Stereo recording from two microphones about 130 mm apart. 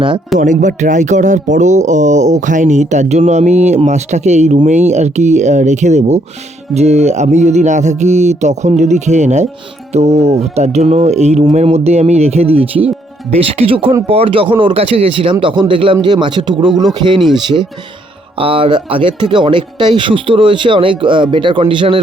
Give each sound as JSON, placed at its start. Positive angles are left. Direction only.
{"t": 0.3, "sound": "speech", "side_deg": -75}
{"t": 18.3, "sound": "speech", "side_deg": -45}